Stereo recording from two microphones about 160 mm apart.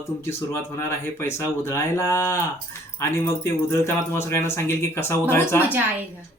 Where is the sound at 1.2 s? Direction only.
15° left (ahead or behind).